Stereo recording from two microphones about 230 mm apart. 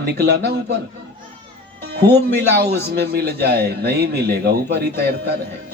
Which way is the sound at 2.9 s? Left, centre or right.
Right.